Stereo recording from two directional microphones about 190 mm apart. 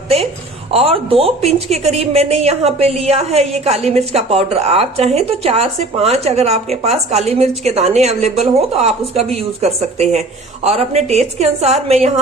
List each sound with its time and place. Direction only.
0.7 s a woman's voice: 30° right (ahead or behind)